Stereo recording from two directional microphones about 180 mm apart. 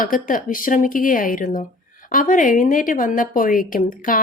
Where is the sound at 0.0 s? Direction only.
50° left (ahead or behind).